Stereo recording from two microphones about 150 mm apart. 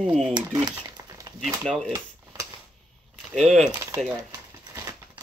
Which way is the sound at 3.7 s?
20° right (ahead or behind).